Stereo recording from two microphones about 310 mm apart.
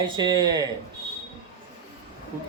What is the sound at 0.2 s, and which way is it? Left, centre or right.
Speech, centre.